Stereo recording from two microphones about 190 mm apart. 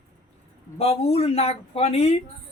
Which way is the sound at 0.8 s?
30° left (ahead or behind).